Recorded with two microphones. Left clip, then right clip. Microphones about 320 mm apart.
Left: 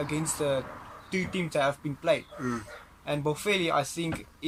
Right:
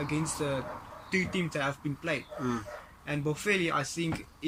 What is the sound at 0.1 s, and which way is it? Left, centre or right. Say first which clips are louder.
Speech: left 4 dB; centre.